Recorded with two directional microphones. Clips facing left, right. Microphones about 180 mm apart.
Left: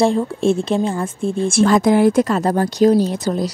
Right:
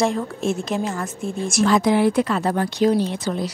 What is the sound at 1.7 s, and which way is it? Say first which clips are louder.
Speech: left 3 dB; 45° left (ahead or behind).